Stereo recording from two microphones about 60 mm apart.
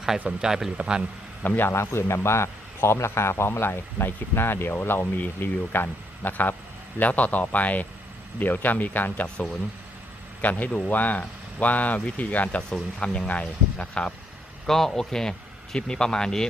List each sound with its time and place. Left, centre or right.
0.4 s speech: centre
1.4 s a man's voice: left
14.7 s speech: centre